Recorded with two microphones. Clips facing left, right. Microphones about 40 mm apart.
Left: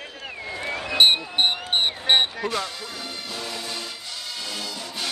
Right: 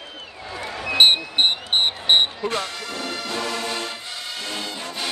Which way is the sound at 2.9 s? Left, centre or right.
Right.